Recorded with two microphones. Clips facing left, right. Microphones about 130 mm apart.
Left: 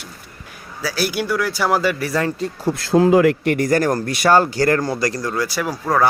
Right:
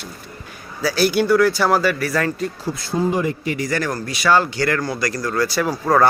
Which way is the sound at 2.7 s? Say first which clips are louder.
Left 8 dB; 90° left.